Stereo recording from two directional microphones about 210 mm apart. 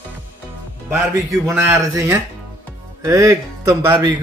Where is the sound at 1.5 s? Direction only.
15° right (ahead or behind).